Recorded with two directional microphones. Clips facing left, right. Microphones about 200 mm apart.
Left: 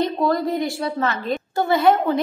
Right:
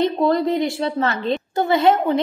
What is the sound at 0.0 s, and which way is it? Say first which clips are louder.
A woman's voice: right 3 dB; 20° right (ahead or behind).